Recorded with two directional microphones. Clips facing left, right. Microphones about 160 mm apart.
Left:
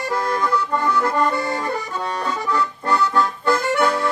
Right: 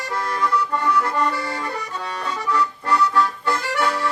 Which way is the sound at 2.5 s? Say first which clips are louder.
Right 1 dB; 30° left (ahead or behind).